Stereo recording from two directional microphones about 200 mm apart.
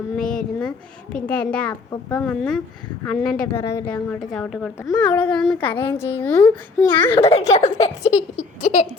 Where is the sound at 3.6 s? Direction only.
15° left (ahead or behind).